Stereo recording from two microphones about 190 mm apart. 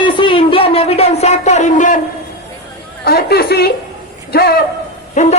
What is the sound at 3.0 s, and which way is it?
A woman's voice, 55° left (ahead or behind).